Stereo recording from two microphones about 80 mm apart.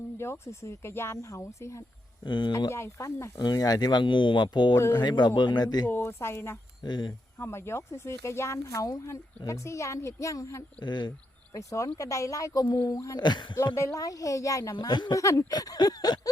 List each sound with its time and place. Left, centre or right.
0.2 s speech: left
2.2 s speech: left
2.6 s speech: left
3.3 s speech: left
5.9 s speech: left
6.8 s speech: left
7.3 s speech: left
10.8 s speech: left
11.5 s speech: left
12.9 s speech: left
13.1 s speech: left
13.7 s speech: left
15.1 s speech: left
15.4 s speech: left